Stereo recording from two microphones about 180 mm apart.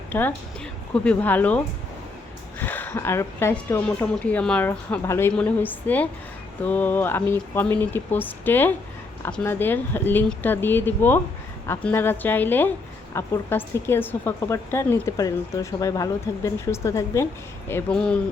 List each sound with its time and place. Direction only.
0.1 s a woman's voice: 10° left (ahead or behind)